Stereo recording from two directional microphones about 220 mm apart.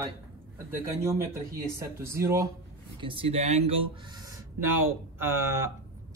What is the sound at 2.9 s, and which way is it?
Speech, 25° right (ahead or behind).